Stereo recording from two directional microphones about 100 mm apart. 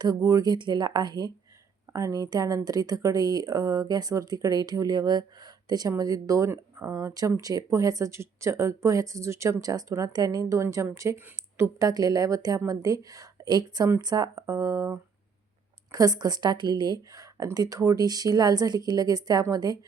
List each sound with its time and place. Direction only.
0.0 s a woman's voice: 40° right (ahead or behind)
14.3 s speech: 30° right (ahead or behind)